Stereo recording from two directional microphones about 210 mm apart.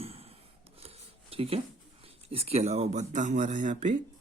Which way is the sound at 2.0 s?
25° right (ahead or behind).